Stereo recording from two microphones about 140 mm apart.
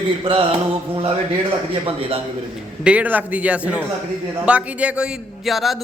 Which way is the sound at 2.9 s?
10° right (ahead or behind).